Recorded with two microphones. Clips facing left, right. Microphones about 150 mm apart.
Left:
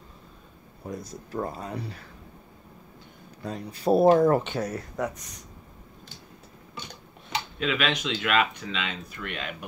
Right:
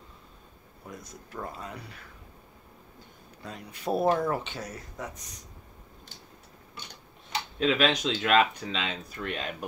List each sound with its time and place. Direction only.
0.8 s speech: 35° left (ahead or behind)
3.4 s speech: 35° left (ahead or behind); by 5.2 s 65° left (ahead or behind)
7.5 s speech: 35° right (ahead or behind)